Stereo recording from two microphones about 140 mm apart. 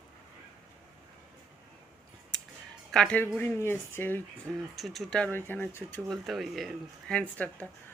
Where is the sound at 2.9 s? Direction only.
5° left (ahead or behind).